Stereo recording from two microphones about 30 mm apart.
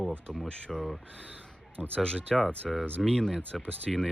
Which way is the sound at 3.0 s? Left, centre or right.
Left.